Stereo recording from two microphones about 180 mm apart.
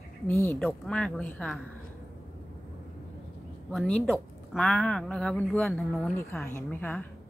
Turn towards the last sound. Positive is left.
turn(degrees=10)  # may be behind; listen again after turning